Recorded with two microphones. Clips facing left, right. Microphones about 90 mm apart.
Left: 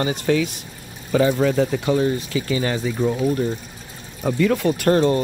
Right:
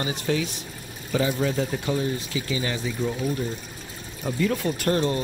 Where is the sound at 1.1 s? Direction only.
75° left (ahead or behind); by 2.4 s 90° left.